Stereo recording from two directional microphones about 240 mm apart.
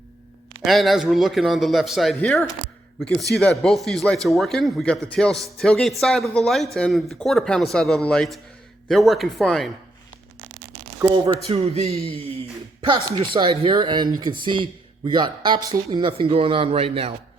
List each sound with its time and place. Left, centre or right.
0.6 s speech: centre
11.4 s speech: right